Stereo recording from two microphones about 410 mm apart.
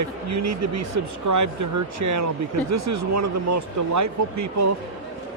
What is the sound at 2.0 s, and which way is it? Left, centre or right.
Speech, right.